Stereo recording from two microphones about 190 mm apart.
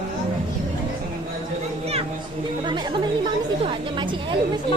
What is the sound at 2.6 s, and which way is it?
Speech, 25° right (ahead or behind).